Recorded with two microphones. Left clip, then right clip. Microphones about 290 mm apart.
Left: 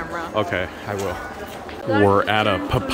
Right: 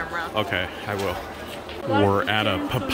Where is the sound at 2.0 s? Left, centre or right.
Centre.